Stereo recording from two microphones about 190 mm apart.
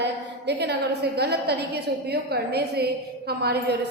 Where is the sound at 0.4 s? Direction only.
60° right (ahead or behind).